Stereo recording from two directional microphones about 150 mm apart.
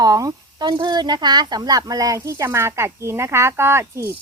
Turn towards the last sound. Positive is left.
turn(degrees=-15)  # may be behind; listen again after turning